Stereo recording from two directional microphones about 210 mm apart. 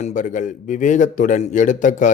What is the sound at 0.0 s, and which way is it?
A man's voice, 40° left (ahead or behind).